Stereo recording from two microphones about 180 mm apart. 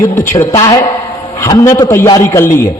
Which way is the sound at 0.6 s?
20° left (ahead or behind).